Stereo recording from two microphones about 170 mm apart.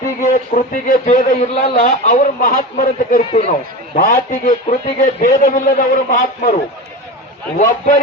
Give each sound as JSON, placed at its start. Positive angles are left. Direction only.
{"t": 0.2, "sound": "a man's voice", "side_deg": 50}
{"t": 7.6, "sound": "a man's voice", "side_deg": 50}